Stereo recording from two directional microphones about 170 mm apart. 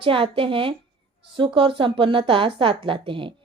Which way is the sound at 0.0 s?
30° right (ahead or behind).